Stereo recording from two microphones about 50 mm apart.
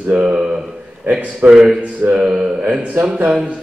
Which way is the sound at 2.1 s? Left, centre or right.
Centre.